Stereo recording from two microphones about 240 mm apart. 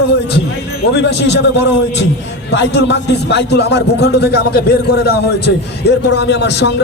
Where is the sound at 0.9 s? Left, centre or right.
Left.